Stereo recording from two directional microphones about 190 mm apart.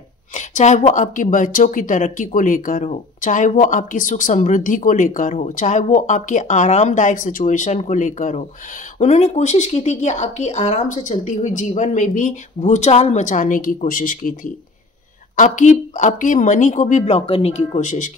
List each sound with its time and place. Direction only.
0.4 s a woman's voice: 40° left (ahead or behind)